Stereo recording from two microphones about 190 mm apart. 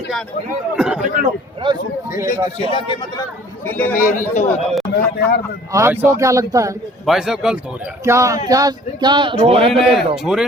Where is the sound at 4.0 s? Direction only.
45° left (ahead or behind).